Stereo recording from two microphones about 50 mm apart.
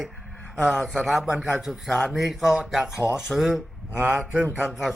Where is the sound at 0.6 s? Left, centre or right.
Right.